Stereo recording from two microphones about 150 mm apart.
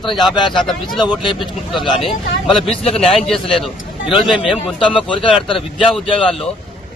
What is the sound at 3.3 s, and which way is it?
A man's voice, centre (ahead or behind).